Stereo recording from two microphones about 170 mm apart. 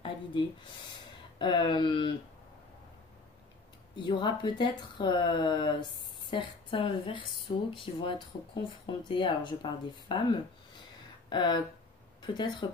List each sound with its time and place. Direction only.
1.4 s speech: 25° left (ahead or behind)
3.9 s speech: 25° left (ahead or behind)